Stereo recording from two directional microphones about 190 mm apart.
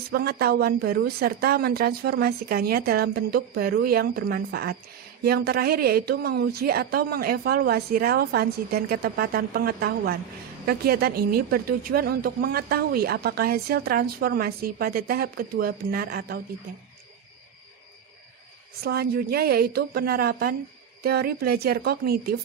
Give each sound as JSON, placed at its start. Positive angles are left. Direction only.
{"t": 0.1, "sound": "a woman's voice", "side_deg": -55}
{"t": 18.8, "sound": "a woman's voice", "side_deg": -55}